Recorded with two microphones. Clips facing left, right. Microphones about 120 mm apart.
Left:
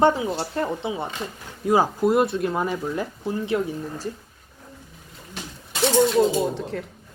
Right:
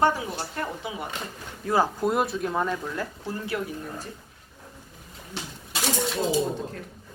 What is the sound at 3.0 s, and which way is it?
Speech, 20° left (ahead or behind).